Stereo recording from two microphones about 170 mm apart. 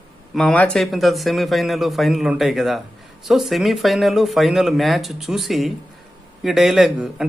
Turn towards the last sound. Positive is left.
turn(degrees=0)  # may be behind; listen again after turning